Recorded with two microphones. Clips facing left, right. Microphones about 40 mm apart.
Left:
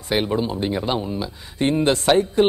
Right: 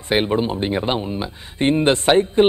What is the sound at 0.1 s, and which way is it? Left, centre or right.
Speech, right.